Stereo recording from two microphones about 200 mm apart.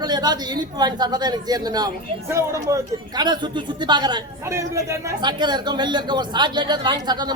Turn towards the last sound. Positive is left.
turn(degrees=-20)  # may be behind; listen again after turning